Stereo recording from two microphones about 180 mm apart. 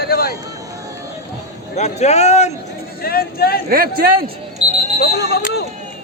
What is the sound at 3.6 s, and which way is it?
Speech, 55° right (ahead or behind).